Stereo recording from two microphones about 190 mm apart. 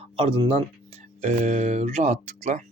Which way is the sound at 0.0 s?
30° right (ahead or behind).